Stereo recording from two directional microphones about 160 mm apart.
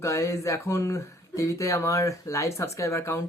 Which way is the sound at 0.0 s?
20° left (ahead or behind).